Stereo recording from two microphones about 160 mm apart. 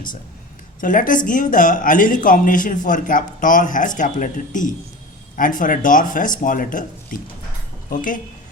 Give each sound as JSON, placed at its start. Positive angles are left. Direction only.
{"t": 0.8, "sound": "speech", "side_deg": 55}